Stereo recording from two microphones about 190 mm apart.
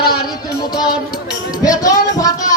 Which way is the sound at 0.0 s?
55° left (ahead or behind).